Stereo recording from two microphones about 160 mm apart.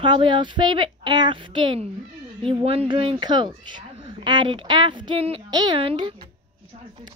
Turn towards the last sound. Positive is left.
turn(degrees=-35)  # may be behind; listen again after turning